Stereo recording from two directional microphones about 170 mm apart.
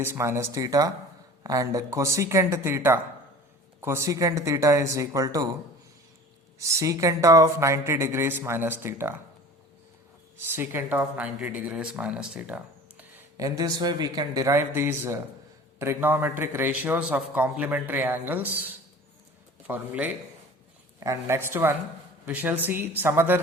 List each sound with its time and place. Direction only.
0.0 s a man's voice: 15° right (ahead or behind)
6.6 s a man's voice: 20° right (ahead or behind)
10.3 s speech: 15° right (ahead or behind)
13.3 s a man's voice: 20° right (ahead or behind)